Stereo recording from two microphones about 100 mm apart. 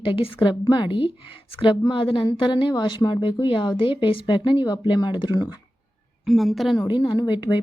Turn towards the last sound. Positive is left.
turn(degrees=50)  # may be behind; listen again after turning